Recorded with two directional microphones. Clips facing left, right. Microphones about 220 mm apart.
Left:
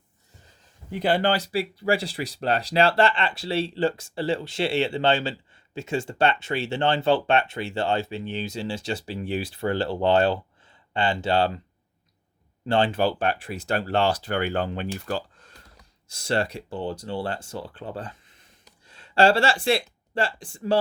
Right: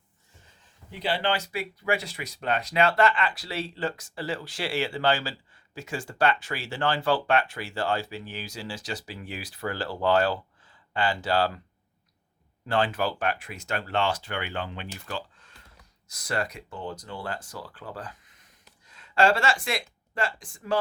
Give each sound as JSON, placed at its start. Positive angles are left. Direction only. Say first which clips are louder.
{"t": 0.9, "sound": "speech", "louder": "left 5 dB", "side_deg": 50}
{"t": 12.6, "sound": "speech", "louder": "left 4 dB", "side_deg": 25}
{"t": 16.0, "sound": "speech", "louder": "left 5 dB", "side_deg": 30}